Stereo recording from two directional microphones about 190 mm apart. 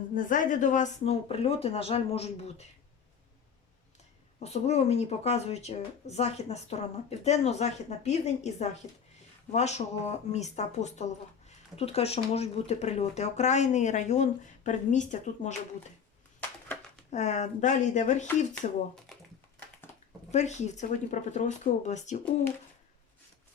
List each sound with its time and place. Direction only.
0.1 s speech: 45° left (ahead or behind)
4.4 s speech: 35° left (ahead or behind)
17.1 s speech: 35° left (ahead or behind)
20.3 s speech: 35° left (ahead or behind)